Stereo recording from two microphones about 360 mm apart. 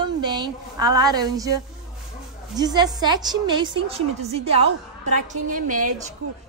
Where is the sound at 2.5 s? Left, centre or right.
Centre.